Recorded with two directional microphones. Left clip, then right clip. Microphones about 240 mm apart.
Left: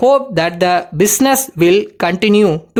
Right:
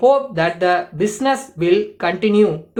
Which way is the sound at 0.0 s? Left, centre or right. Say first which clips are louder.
Left 3 dB; left.